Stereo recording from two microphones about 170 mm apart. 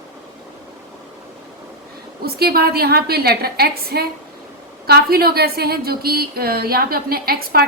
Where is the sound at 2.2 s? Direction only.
65° right (ahead or behind).